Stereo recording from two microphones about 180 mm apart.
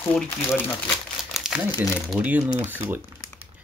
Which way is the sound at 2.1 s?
10° right (ahead or behind).